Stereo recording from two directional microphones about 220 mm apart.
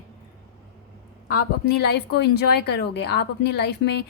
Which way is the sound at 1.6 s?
50° left (ahead or behind).